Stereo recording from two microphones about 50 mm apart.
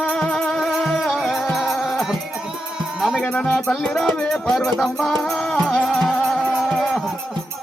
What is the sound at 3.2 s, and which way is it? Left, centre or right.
Music, left.